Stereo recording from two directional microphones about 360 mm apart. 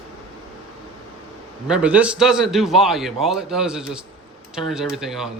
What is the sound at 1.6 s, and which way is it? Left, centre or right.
A man's voice, centre.